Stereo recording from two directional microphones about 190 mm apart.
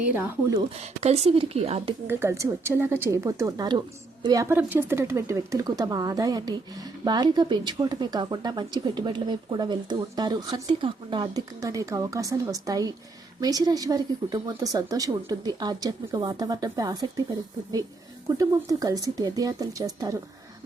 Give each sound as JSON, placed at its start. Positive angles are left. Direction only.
{"t": 0.0, "sound": "speech", "side_deg": -10}
{"t": 0.8, "sound": "speech", "side_deg": -35}
{"t": 2.0, "sound": "a woman's voice", "side_deg": -15}
{"t": 18.3, "sound": "a woman's voice", "side_deg": -20}